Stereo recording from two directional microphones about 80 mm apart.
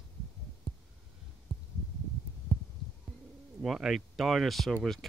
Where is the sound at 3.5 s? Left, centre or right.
Centre.